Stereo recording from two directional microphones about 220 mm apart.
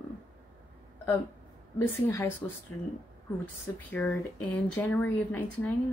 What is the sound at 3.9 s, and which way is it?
A woman's voice, 10° left (ahead or behind).